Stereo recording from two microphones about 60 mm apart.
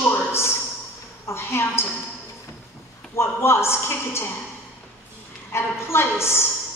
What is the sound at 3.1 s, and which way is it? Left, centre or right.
A woman's voice, left.